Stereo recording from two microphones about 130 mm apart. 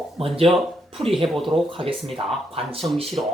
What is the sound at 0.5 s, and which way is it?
Speech, centre (ahead or behind).